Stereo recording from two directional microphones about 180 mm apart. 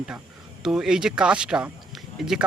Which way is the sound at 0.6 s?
5° right (ahead or behind).